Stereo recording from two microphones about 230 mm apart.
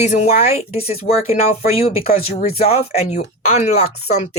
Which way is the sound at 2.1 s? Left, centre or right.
Left.